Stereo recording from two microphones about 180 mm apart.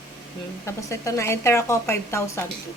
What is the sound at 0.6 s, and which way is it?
A woman's voice, 15° left (ahead or behind).